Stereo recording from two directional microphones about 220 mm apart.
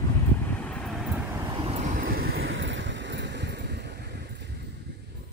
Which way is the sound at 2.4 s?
55° right (ahead or behind).